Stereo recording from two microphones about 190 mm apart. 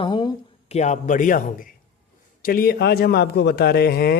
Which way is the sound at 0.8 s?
40° left (ahead or behind).